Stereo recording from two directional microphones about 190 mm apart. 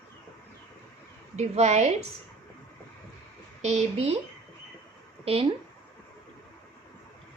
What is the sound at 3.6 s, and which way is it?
Speech, 35° right (ahead or behind).